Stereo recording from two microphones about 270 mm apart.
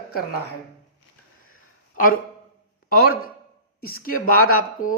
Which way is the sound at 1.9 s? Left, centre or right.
Left.